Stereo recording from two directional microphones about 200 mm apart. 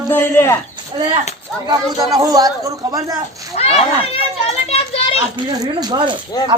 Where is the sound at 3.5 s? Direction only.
30° left (ahead or behind).